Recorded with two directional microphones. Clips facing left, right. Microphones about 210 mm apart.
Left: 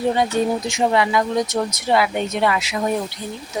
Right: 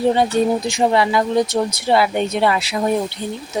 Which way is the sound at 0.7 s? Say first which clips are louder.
Right 2 dB; 30° right (ahead or behind).